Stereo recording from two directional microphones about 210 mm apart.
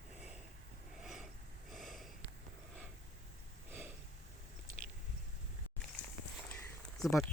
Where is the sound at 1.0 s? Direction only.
Centre (ahead or behind).